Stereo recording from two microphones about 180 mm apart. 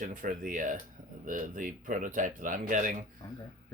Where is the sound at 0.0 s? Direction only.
45° right (ahead or behind).